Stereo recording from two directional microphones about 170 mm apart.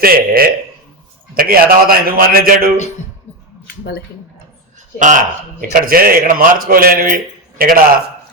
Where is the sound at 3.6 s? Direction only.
70° left (ahead or behind).